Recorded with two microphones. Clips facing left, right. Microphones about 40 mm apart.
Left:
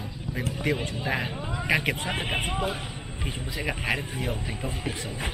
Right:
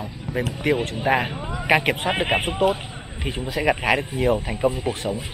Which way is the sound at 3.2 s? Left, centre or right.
Right.